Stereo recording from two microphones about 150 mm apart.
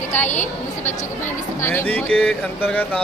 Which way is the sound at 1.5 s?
15° left (ahead or behind).